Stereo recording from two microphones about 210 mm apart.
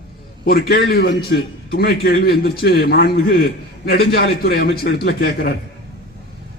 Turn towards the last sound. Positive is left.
turn(degrees=50)  # may be behind; listen again after turning